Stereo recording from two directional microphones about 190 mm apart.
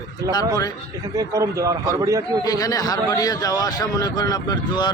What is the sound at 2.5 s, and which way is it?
A man's voice, 20° left (ahead or behind).